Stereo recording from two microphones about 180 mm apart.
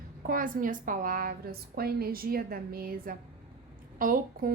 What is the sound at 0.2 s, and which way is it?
A woman's voice, 50° right (ahead or behind).